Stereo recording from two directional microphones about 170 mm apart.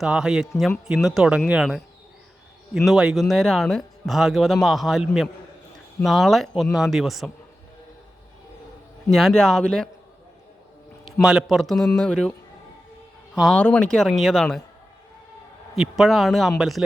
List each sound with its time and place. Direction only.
0.0 s speech: 5° right (ahead or behind)
9.0 s speech: centre (ahead or behind)
11.0 s speech: centre (ahead or behind)
13.3 s speech: centre (ahead or behind)
15.8 s speech: centre (ahead or behind)